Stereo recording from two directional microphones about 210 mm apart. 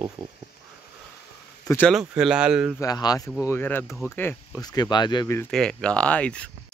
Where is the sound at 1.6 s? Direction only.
10° left (ahead or behind).